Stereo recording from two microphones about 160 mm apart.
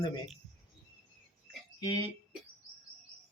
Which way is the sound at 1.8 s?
25° left (ahead or behind).